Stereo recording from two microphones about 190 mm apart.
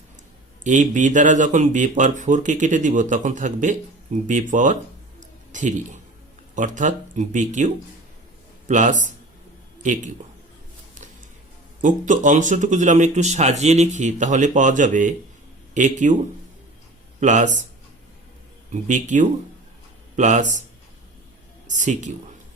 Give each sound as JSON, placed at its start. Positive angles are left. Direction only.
{"t": 0.6, "sound": "speech", "side_deg": -40}
{"t": 11.8, "sound": "speech", "side_deg": -45}
{"t": 17.2, "sound": "speech", "side_deg": -40}
{"t": 18.7, "sound": "speech", "side_deg": -40}
{"t": 21.7, "sound": "speech", "side_deg": -40}